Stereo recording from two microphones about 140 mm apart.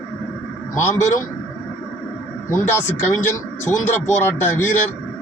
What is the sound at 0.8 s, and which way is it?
Speech, 20° left (ahead or behind).